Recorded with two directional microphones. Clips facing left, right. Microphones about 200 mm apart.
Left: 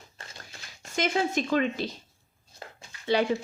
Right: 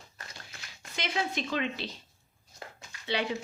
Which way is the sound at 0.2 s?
30° left (ahead or behind).